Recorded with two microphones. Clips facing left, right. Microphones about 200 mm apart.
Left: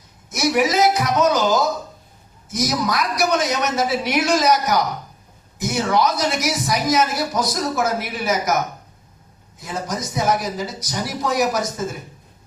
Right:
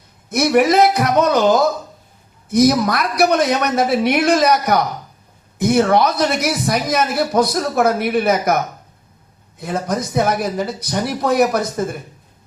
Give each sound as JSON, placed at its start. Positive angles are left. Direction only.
{"t": 0.3, "sound": "speech", "side_deg": -55}
{"t": 9.6, "sound": "speech", "side_deg": -60}